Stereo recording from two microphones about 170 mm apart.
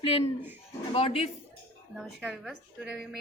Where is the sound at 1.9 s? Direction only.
5° right (ahead or behind).